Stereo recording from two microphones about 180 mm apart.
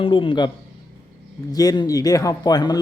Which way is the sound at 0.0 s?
30° left (ahead or behind).